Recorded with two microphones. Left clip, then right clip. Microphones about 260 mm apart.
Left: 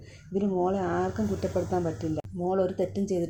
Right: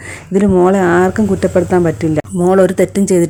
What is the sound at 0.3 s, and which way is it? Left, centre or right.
Speech, right.